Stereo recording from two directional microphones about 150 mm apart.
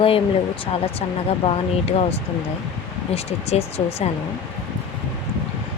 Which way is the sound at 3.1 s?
45° left (ahead or behind).